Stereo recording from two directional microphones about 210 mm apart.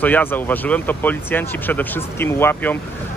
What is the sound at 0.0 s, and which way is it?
Speech, 10° left (ahead or behind).